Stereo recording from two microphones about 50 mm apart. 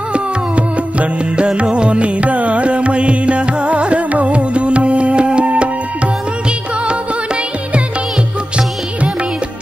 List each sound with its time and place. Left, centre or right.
0.1 s music: right